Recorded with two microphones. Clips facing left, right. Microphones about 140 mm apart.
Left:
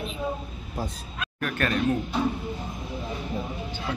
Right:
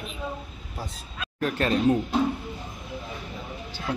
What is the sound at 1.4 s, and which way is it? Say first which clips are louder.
Speech: right 3 dB; 30° right (ahead or behind).